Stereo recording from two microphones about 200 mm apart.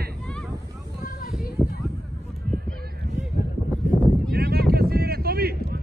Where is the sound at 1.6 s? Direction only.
5° right (ahead or behind).